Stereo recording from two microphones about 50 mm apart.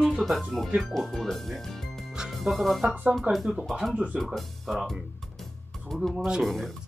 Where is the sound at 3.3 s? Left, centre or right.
Right.